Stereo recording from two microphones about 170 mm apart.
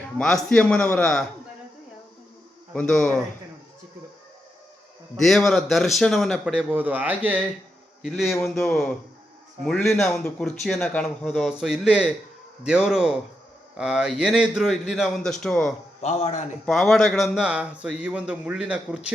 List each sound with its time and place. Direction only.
0.2 s speech: 5° left (ahead or behind)
2.7 s speech: 5° left (ahead or behind)
5.2 s speech: centre (ahead or behind)
16.0 s a man's voice: 35° left (ahead or behind)
16.6 s speech: centre (ahead or behind)